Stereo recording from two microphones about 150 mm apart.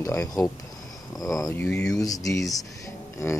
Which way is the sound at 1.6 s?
5° left (ahead or behind).